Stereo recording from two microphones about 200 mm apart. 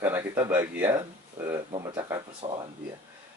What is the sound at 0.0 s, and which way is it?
Speech, 10° right (ahead or behind).